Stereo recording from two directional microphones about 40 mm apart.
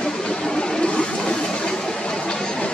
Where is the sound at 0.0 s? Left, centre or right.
Centre.